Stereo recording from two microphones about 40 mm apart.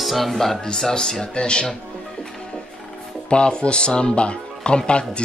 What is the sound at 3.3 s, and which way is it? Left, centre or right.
Speech, left.